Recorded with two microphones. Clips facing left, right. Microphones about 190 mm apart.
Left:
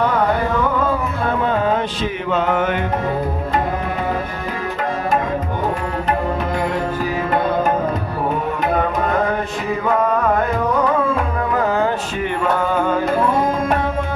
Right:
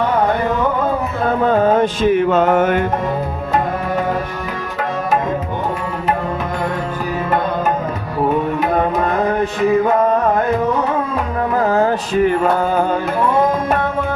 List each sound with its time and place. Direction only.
1.5 s music: 45° right (ahead or behind)
11.7 s mantra: 40° right (ahead or behind)